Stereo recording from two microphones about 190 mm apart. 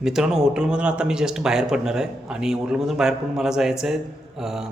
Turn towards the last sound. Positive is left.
turn(degrees=0)  # may be behind; listen again after turning